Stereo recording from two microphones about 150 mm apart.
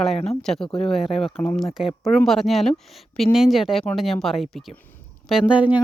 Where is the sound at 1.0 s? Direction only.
40° left (ahead or behind).